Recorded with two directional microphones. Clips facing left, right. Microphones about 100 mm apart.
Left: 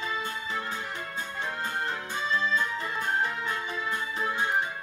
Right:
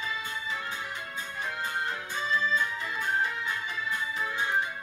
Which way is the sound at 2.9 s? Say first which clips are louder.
Even; 30° left (ahead or behind).